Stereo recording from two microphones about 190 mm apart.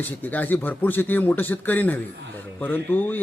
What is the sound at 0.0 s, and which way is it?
Speech, 10° left (ahead or behind).